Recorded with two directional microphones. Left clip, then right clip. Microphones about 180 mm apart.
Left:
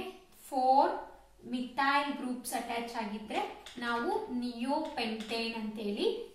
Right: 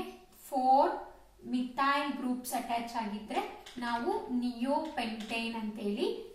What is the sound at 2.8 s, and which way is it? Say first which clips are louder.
Speech: right 1 dB; centre (ahead or behind).